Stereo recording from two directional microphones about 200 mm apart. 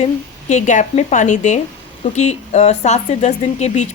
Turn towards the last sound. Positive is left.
turn(degrees=35)  # may be behind; listen again after turning